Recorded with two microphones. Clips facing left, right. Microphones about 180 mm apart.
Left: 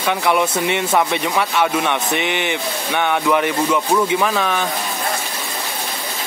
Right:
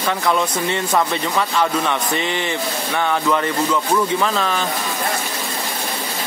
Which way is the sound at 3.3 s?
10° left (ahead or behind).